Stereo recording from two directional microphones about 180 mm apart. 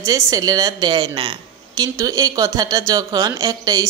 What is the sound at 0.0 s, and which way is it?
Speech, 20° right (ahead or behind).